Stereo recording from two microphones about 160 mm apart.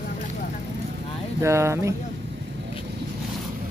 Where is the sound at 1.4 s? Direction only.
15° right (ahead or behind).